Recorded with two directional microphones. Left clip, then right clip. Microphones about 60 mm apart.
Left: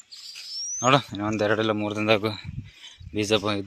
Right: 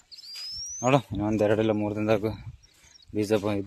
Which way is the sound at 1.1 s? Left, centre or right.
Right.